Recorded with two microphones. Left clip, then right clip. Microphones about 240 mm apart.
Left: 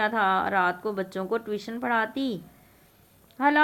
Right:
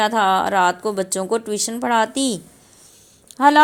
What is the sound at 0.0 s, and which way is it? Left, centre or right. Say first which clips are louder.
A woman's voice: right 7 dB; centre.